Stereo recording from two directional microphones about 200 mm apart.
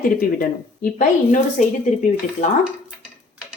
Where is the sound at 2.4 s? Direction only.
35° left (ahead or behind).